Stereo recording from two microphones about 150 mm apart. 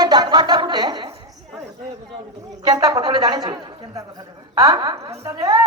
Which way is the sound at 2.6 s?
30° right (ahead or behind).